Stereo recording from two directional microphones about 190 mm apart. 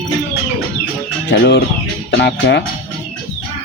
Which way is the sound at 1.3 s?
65° left (ahead or behind).